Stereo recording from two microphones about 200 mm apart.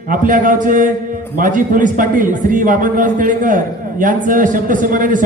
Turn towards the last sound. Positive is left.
turn(degrees=-40)  # may be behind; listen again after turning